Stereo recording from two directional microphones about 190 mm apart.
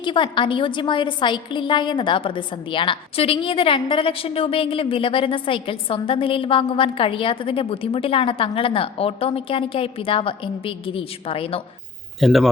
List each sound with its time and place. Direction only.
0.0 s a woman's voice: 25° left (ahead or behind)
12.2 s speech: centre (ahead or behind)